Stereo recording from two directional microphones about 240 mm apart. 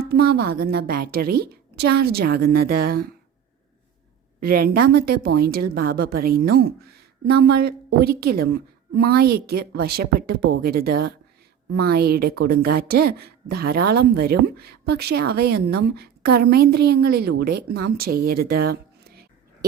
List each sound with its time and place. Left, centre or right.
0.1 s a woman's voice: right
4.4 s a woman's voice: right